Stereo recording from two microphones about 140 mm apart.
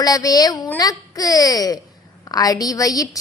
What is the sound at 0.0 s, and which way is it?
A woman's voice, 25° left (ahead or behind).